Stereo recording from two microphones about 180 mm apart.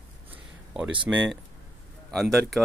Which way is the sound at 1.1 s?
10° right (ahead or behind).